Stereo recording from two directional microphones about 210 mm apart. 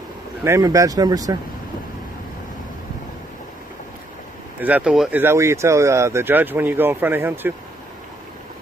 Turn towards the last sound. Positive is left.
turn(degrees=-10)  # may be behind; listen again after turning